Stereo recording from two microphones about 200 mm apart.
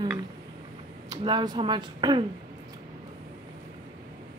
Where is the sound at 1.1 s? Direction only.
20° right (ahead or behind).